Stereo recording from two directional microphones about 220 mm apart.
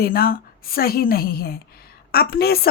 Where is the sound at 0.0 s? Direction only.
40° left (ahead or behind).